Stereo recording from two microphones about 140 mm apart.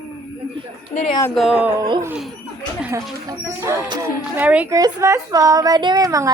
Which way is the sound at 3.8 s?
30° right (ahead or behind).